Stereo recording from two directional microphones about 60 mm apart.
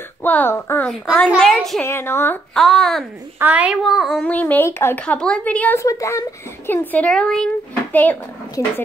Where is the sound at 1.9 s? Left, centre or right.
Left.